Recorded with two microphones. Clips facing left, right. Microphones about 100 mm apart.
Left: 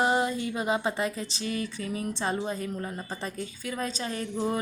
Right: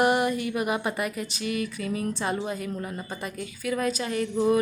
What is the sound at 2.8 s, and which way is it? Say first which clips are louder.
A woman's voice: right 1 dB; 30° left (ahead or behind).